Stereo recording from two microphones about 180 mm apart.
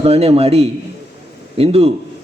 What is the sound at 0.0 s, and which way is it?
A man's voice, 35° right (ahead or behind).